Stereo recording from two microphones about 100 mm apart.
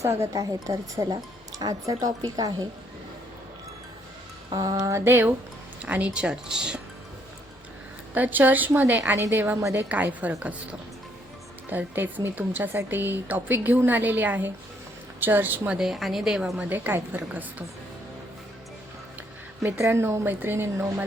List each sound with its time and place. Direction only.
0.0 s speech: 30° right (ahead or behind)
4.5 s speech: 40° right (ahead or behind); by 5.3 s 25° right (ahead or behind)
5.8 s a woman's voice: 15° right (ahead or behind)
8.1 s a woman's voice: 15° right (ahead or behind)
9.9 s a woman's voice: 15° right (ahead or behind)
15.8 s a woman's voice: centre (ahead or behind)
19.6 s speech: 25° right (ahead or behind)